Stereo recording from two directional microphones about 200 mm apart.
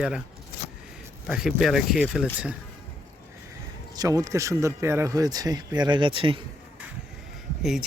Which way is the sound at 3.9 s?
15° right (ahead or behind).